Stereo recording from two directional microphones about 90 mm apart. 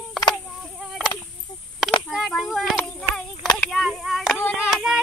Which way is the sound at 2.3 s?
Centre (ahead or behind).